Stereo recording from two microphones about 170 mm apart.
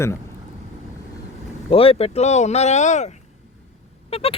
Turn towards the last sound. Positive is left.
turn(degrees=35)  # may be behind; listen again after turning